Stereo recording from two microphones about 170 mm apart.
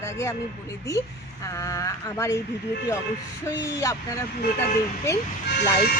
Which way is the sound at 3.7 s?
20° left (ahead or behind).